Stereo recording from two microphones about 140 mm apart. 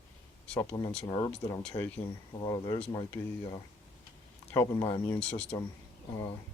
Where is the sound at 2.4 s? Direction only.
30° left (ahead or behind).